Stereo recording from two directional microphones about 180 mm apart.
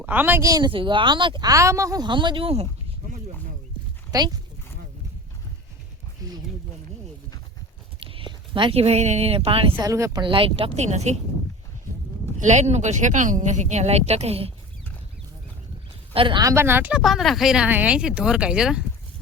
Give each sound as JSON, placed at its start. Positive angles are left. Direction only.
{"t": 0.0, "sound": "speech", "side_deg": -10}
{"t": 4.1, "sound": "speech", "side_deg": -20}
{"t": 6.2, "sound": "a sound", "side_deg": -20}
{"t": 8.0, "sound": "speech", "side_deg": -30}
{"t": 9.7, "sound": "speech", "side_deg": -15}
{"t": 12.4, "sound": "speech", "side_deg": -40}
{"t": 16.1, "sound": "speech", "side_deg": -25}
{"t": 17.0, "sound": "speech", "side_deg": 0}